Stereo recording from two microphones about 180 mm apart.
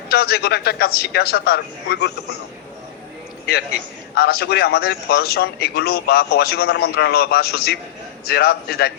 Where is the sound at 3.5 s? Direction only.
60° left (ahead or behind).